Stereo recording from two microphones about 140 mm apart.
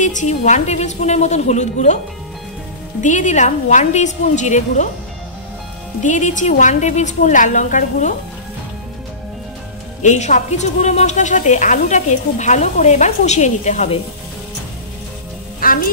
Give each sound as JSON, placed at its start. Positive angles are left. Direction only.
{"t": 0.0, "sound": "speech", "side_deg": 60}
{"t": 3.0, "sound": "speech", "side_deg": 60}
{"t": 6.0, "sound": "speech", "side_deg": 60}
{"t": 10.0, "sound": "speech", "side_deg": 60}
{"t": 15.6, "sound": "music", "side_deg": 85}